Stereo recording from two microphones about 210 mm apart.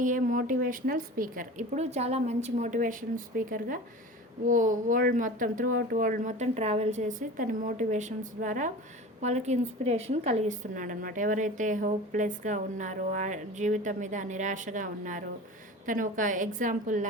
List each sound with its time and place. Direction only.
0.0 s a woman's voice: 40° right (ahead or behind)